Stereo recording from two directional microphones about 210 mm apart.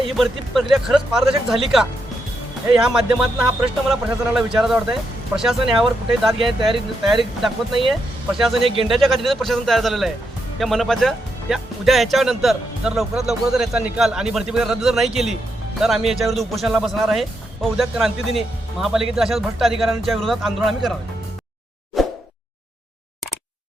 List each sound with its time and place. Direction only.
0.2 s speech: centre (ahead or behind)
8.6 s speech: 25° right (ahead or behind)
8.9 s speech: centre (ahead or behind)
22.0 s plop: centre (ahead or behind)